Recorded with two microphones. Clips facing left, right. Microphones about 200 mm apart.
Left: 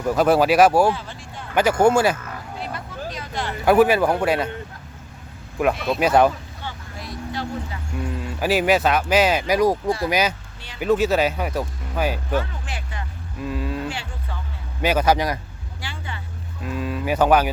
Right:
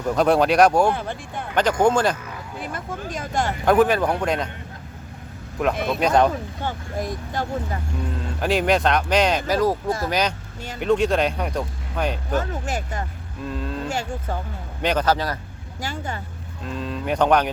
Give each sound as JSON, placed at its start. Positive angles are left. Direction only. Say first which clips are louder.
{"t": 0.1, "sound": "speech", "louder": "left 1 dB", "side_deg": 5}
{"t": 0.9, "sound": "speech", "louder": "even", "side_deg": -55}
{"t": 1.5, "sound": "speech", "louder": "left 2 dB", "side_deg": 10}
{"t": 2.6, "sound": "a sound", "louder": "right 2 dB", "side_deg": -50}
{"t": 3.7, "sound": "speech", "louder": "left 2 dB", "side_deg": 5}
{"t": 5.6, "sound": "speech", "louder": "left 1 dB", "side_deg": 5}
{"t": 6.6, "sound": "a sound", "louder": "right 8 dB", "side_deg": -50}
{"t": 8.4, "sound": "speech", "louder": "left 1 dB", "side_deg": 5}
{"t": 12.3, "sound": "speech", "louder": "right 1 dB", "side_deg": -45}
{"t": 13.4, "sound": "cattle", "louder": "left 2 dB", "side_deg": 5}
{"t": 13.8, "sound": "a sound", "louder": "right 4 dB", "side_deg": -45}
{"t": 14.8, "sound": "speech", "louder": "left 2 dB", "side_deg": 10}
{"t": 15.8, "sound": "vehicle", "louder": "right 6 dB", "side_deg": -45}
{"t": 16.6, "sound": "speech", "louder": "left 2 dB", "side_deg": 5}